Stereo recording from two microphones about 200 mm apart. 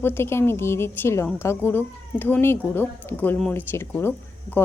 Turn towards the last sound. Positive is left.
turn(degrees=10)  # may be behind; listen again after turning